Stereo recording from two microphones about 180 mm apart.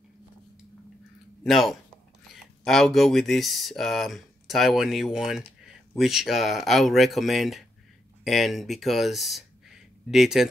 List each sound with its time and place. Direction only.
1.4 s speech: centre (ahead or behind)